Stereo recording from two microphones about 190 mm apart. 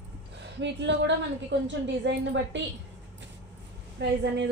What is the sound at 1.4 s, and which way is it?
A woman's voice, 70° right (ahead or behind).